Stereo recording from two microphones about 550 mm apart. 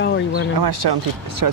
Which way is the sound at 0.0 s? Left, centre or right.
Centre.